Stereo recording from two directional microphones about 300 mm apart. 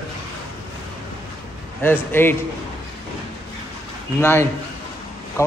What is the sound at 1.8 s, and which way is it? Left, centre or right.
Speech, centre.